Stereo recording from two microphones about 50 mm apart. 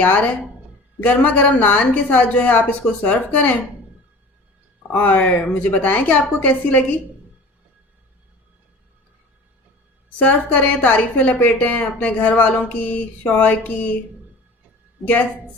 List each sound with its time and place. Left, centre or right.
0.0 s a woman's voice: left
4.9 s a woman's voice: left
5.2 s a woman's voice: left
10.2 s a woman's voice: left
15.0 s a woman's voice: left